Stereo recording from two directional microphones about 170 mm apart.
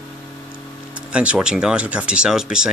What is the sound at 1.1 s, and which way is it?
Speech, 5° right (ahead or behind).